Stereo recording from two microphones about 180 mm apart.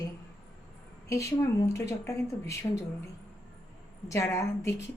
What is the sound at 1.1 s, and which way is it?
A woman's voice, 15° left (ahead or behind).